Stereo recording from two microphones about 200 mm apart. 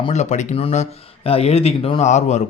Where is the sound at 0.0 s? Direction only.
35° left (ahead or behind).